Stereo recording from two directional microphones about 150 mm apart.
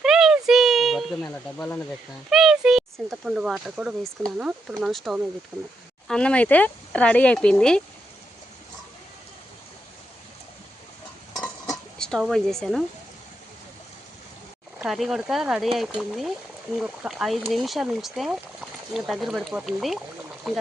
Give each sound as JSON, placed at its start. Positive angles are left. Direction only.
{"t": 0.0, "sound": "a sound", "side_deg": 0}
{"t": 1.5, "sound": "speech", "side_deg": 10}
{"t": 5.5, "sound": "speech", "side_deg": -25}
{"t": 6.1, "sound": "speech", "side_deg": 5}
{"t": 11.7, "sound": "a sound", "side_deg": 5}
{"t": 14.8, "sound": "speech", "side_deg": 0}